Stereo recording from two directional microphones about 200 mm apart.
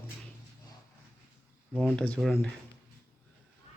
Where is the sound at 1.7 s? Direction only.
5° left (ahead or behind).